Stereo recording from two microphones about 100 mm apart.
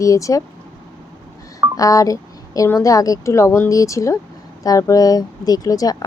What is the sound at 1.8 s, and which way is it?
Speech, 35° left (ahead or behind).